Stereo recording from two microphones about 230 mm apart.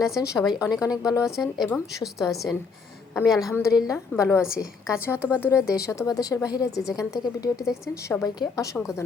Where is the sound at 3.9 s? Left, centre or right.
Centre.